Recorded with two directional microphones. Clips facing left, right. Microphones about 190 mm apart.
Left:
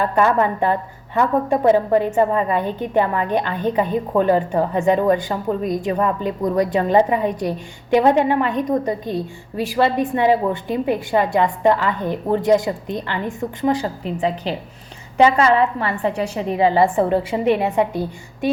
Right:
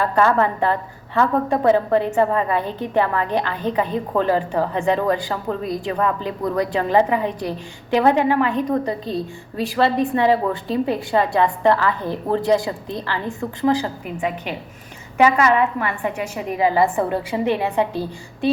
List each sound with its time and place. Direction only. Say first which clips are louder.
0.0 s a woman's voice: even; 15° left (ahead or behind)
13.8 s a woman's voice: left 3 dB; 30° left (ahead or behind); by 18.5 s 15° left (ahead or behind)